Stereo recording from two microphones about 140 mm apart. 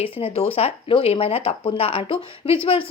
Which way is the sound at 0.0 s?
45° left (ahead or behind).